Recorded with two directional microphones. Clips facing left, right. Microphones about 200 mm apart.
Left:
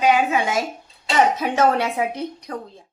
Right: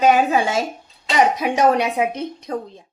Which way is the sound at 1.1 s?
15° right (ahead or behind).